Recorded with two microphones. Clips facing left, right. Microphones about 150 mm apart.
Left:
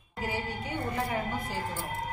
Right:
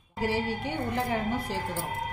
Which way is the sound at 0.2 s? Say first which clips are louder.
Right 5 dB; 90° right.